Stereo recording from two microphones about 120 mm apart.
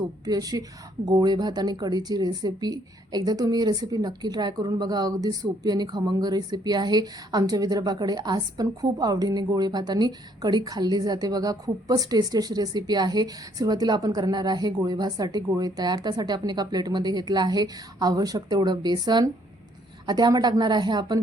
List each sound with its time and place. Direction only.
0.3 s speech: 30° right (ahead or behind)